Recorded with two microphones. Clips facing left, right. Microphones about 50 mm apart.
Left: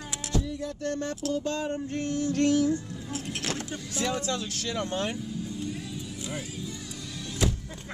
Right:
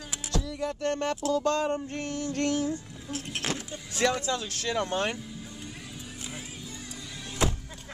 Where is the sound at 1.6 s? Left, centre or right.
Right.